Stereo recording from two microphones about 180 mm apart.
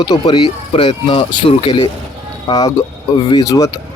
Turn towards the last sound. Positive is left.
turn(degrees=20)  # may be behind; listen again after turning